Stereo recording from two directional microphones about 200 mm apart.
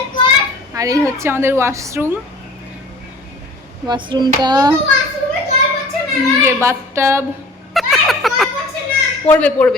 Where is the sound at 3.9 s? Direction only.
25° right (ahead or behind).